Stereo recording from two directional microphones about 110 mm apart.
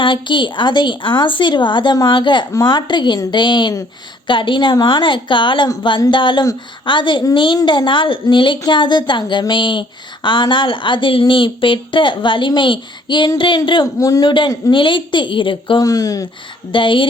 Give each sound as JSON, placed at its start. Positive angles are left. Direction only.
{"t": 0.0, "sound": "speech", "side_deg": 45}
{"t": 13.8, "sound": "speech", "side_deg": 30}
{"t": 15.8, "sound": "speech", "side_deg": 35}
{"t": 16.7, "sound": "speech", "side_deg": 50}